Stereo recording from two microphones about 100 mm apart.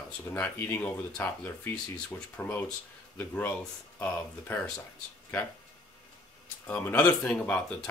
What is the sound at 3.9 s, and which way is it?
Speech, 20° left (ahead or behind).